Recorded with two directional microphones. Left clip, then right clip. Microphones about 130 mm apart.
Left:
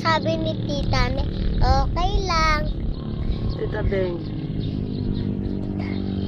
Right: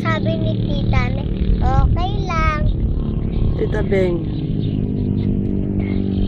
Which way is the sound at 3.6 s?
50° right (ahead or behind).